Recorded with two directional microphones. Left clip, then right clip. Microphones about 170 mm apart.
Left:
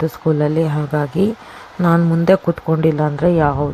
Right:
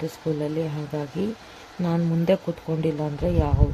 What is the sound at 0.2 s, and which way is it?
A man's voice, 15° left (ahead or behind).